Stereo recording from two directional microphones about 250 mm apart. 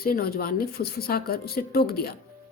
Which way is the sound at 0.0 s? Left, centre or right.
Left.